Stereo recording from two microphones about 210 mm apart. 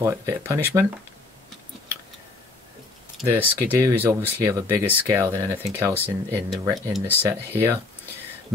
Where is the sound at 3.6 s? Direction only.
10° right (ahead or behind).